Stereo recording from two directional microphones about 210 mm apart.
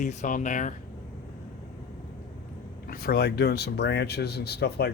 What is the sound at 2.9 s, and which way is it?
Speech, 45° left (ahead or behind).